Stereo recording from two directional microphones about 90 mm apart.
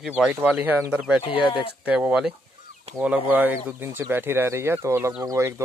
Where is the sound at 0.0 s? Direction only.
10° right (ahead or behind).